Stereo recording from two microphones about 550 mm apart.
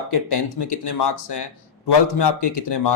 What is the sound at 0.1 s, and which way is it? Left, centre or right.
Speech, left.